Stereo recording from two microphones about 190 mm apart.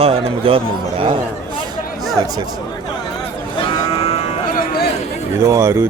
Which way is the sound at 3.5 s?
25° left (ahead or behind).